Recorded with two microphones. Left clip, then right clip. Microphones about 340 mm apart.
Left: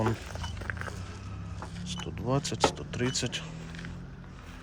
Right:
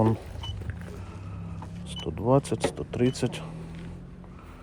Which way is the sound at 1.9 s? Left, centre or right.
Centre.